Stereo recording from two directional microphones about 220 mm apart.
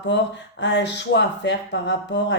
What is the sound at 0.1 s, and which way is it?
Speech, 55° left (ahead or behind).